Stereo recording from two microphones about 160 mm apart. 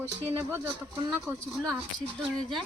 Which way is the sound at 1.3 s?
10° right (ahead or behind).